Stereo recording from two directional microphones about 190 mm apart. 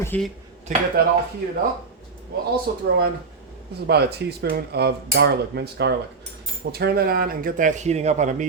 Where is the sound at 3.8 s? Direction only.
60° right (ahead or behind).